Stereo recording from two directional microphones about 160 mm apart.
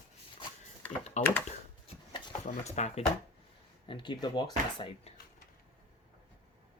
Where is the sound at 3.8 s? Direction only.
30° left (ahead or behind).